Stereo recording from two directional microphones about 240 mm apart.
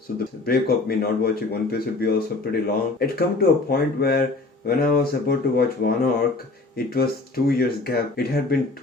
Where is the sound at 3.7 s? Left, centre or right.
Left.